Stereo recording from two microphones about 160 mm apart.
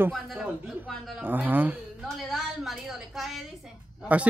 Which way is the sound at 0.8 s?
Centre (ahead or behind).